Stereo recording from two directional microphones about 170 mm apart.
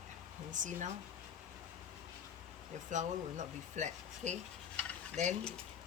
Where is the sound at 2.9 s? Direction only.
45° right (ahead or behind).